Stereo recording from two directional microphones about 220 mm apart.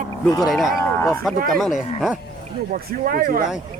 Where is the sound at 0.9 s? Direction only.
10° left (ahead or behind).